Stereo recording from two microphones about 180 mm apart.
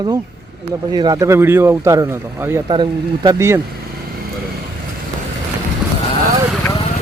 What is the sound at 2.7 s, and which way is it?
Speech, 25° right (ahead or behind).